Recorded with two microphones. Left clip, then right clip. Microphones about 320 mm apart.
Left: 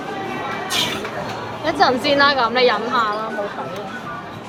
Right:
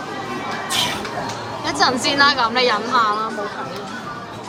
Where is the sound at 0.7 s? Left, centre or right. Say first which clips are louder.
Right 1 dB; right.